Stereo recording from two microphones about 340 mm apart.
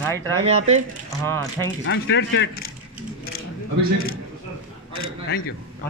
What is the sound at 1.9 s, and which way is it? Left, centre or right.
Speech, left.